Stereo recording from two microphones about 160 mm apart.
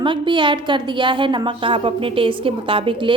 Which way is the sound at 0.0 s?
30° right (ahead or behind).